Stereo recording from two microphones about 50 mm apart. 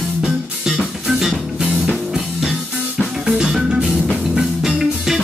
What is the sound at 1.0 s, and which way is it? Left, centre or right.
Music, centre.